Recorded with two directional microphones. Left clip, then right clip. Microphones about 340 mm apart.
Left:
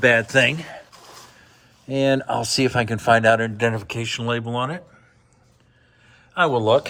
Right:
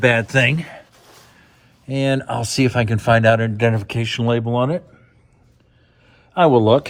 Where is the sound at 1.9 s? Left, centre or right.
Centre.